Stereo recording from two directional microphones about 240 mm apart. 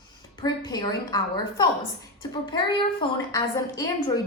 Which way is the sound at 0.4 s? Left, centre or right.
Centre.